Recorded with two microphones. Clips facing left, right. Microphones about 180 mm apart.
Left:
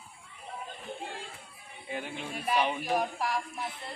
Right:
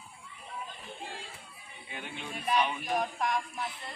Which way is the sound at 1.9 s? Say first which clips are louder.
Left 4 dB; 35° left (ahead or behind).